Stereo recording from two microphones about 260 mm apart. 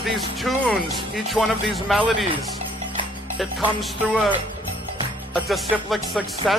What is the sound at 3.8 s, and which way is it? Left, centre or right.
Speech, centre.